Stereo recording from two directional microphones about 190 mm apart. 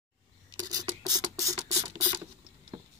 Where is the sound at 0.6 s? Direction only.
20° right (ahead or behind).